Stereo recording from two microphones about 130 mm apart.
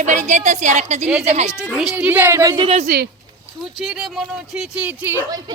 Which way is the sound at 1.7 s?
5° right (ahead or behind).